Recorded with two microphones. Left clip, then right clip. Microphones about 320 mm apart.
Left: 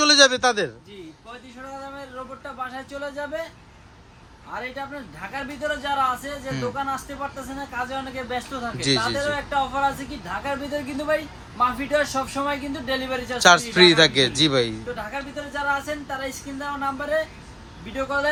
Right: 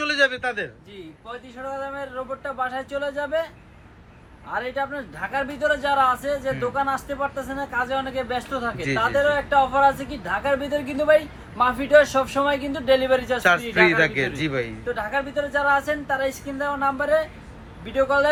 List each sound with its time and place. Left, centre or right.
0.0 s a man's voice: centre
2.0 s speech: centre
4.5 s speech: centre